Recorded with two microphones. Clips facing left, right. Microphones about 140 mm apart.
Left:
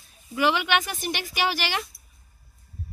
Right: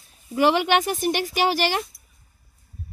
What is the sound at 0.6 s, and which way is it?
Speech, 40° right (ahead or behind).